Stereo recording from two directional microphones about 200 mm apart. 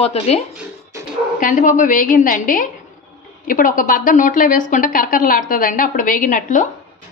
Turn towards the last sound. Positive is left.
turn(degrees=40)  # may be behind; listen again after turning